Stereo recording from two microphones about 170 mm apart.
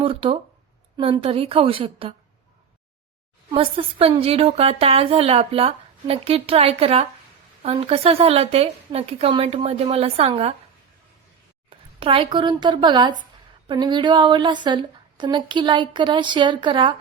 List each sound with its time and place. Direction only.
0.0 s a woman's voice: 35° right (ahead or behind)
3.5 s a woman's voice: 35° right (ahead or behind)
11.7 s a woman's voice: 30° right (ahead or behind)